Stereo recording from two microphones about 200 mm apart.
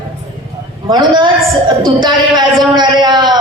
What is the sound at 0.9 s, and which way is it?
A man's voice, 20° right (ahead or behind).